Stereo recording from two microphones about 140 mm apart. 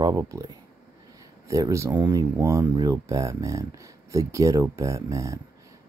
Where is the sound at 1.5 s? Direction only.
20° right (ahead or behind).